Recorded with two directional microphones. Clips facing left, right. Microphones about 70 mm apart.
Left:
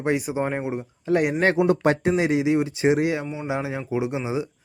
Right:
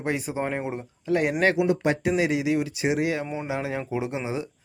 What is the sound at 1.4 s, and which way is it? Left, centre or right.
Speech, left.